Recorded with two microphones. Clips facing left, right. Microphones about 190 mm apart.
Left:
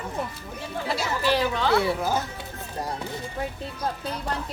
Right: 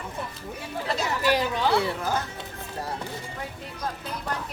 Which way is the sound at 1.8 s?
10° left (ahead or behind).